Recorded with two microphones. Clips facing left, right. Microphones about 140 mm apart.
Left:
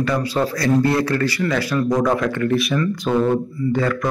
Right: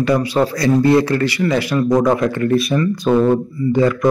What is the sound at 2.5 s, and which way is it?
Speech, 40° right (ahead or behind).